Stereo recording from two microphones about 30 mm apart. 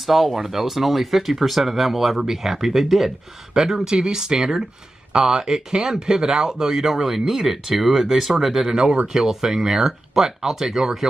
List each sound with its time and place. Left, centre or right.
0.0 s speech: centre
3.5 s speech: right
6.7 s speech: centre